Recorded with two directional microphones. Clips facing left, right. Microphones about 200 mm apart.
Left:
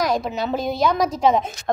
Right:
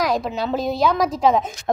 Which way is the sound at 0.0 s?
Centre (ahead or behind).